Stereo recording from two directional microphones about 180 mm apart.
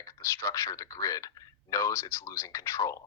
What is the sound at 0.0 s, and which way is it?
Speech, 20° left (ahead or behind).